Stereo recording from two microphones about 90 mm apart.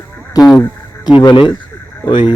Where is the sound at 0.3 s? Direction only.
45° left (ahead or behind).